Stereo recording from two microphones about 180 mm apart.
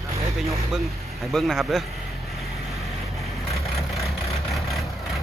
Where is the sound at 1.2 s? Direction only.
Centre (ahead or behind).